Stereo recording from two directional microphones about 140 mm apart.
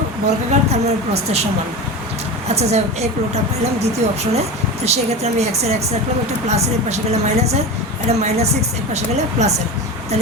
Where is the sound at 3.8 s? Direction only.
50° right (ahead or behind).